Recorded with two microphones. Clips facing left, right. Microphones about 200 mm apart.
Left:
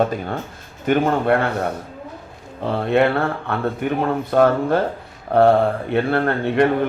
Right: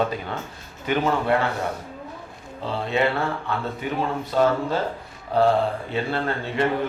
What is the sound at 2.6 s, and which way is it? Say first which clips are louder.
Speech: left 6 dB; 55° left (ahead or behind).